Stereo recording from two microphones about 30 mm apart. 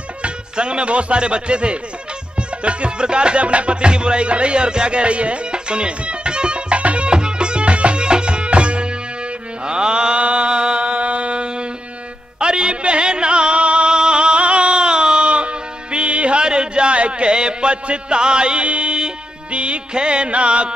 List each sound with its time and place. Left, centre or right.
0.2 s speech: right
2.5 s music: right
7.1 s music: right
14.4 s music: right